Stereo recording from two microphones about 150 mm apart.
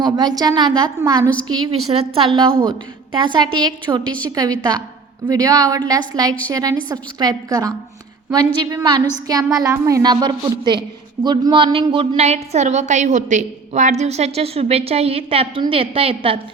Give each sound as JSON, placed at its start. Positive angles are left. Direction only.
{"t": 0.0, "sound": "a woman's voice", "side_deg": -25}
{"t": 1.7, "sound": "a woman's voice", "side_deg": -40}
{"t": 8.7, "sound": "a woman's voice", "side_deg": -25}